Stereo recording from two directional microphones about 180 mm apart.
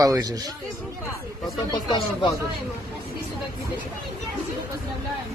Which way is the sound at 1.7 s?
25° left (ahead or behind).